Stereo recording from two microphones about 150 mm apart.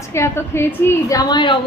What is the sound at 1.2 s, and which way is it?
Speech, 30° left (ahead or behind).